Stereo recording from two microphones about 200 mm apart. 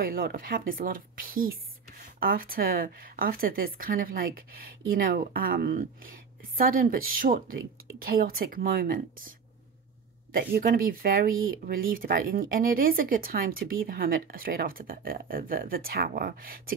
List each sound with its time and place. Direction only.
0.0 s speech: 45° right (ahead or behind)
10.3 s speech: 50° right (ahead or behind)